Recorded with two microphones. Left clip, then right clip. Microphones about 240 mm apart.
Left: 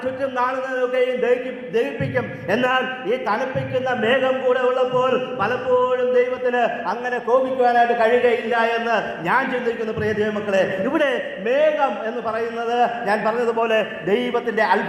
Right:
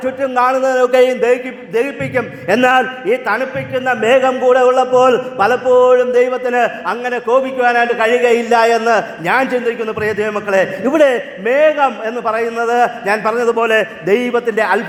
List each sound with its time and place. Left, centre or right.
0.0 s a man's voice: right